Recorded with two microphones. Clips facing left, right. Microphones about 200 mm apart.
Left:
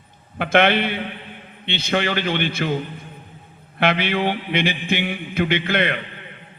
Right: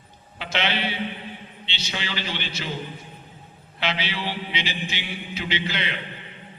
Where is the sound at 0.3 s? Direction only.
55° left (ahead or behind).